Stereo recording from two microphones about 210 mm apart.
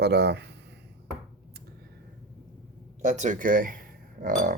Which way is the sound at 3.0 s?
35° right (ahead or behind).